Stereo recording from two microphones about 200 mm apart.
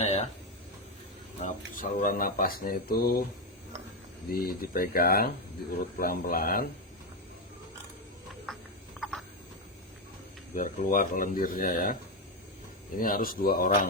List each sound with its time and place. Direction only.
0.0 s a sound: 30° left (ahead or behind)
1.4 s speech: 40° left (ahead or behind)
4.3 s speech: 50° left (ahead or behind)
8.5 s frog: centre (ahead or behind)
9.0 s a sound: centre (ahead or behind)
10.5 s speech: 40° left (ahead or behind)
13.0 s speech: 45° left (ahead or behind)